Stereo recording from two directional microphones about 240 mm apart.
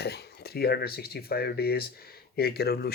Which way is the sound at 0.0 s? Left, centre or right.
Left.